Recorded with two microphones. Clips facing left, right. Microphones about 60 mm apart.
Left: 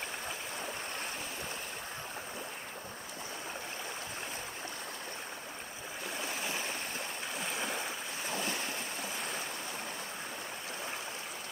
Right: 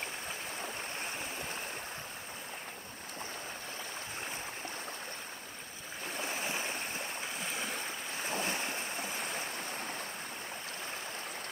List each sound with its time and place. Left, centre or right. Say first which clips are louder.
6.2 s stream: right 1 dB; right
7.5 s stream: left 3 dB; centre
8.3 s waves: right 1 dB; right